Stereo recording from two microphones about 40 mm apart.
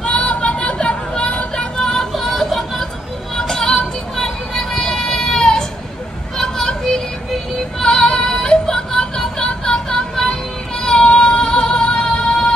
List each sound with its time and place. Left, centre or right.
0.0 s a sound: left
1.8 s music: centre
2.1 s a sound: centre
3.3 s vehicle: centre
6.3 s children playing: centre
7.8 s music: left
11.0 s music: left